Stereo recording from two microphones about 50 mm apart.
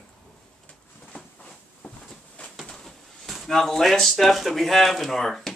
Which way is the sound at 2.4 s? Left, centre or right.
Left.